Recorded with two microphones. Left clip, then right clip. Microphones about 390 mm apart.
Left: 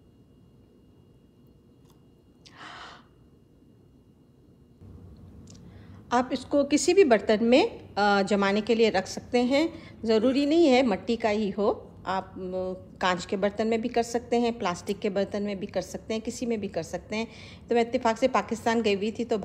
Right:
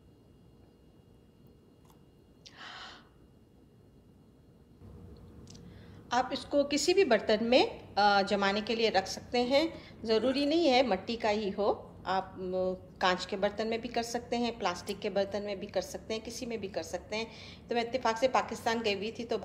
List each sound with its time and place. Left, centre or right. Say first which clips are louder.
2.4 s owl: left 3 dB; centre
5.4 s a woman's voice: left 3 dB; centre